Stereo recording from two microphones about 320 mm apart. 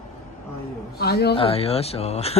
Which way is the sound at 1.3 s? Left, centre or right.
Centre.